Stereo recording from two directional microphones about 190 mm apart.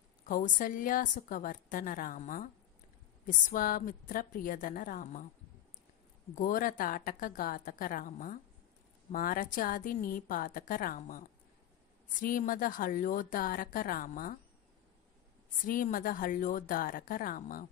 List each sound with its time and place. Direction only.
0.3 s a woman's voice: 45° left (ahead or behind)
6.3 s a woman's voice: 45° left (ahead or behind)
15.6 s a woman's voice: 45° left (ahead or behind)